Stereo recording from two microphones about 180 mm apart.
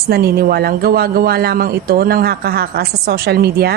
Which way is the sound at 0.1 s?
60° right (ahead or behind).